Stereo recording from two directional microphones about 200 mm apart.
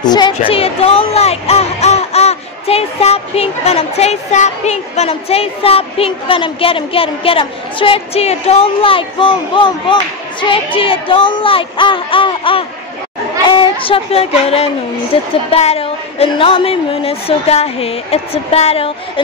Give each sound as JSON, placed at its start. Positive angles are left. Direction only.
{"t": 0.0, "sound": "a woman's voice", "side_deg": 20}